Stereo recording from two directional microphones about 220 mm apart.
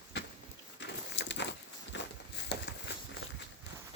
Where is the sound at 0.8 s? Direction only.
55° left (ahead or behind).